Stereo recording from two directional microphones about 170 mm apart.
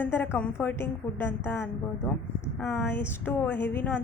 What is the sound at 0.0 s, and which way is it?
A woman's voice, 15° left (ahead or behind).